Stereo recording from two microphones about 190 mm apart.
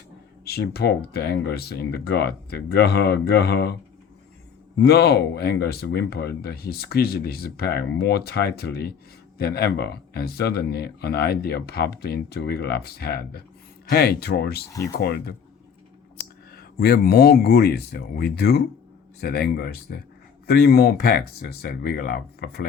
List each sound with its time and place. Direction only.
0.4 s speech: 55° left (ahead or behind)
4.8 s speech: 60° left (ahead or behind)
16.5 s speech: 55° left (ahead or behind)